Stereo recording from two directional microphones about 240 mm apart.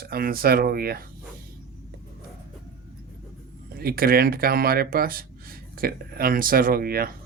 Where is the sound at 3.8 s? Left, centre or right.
Right.